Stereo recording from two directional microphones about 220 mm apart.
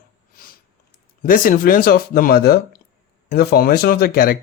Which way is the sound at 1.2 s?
40° left (ahead or behind).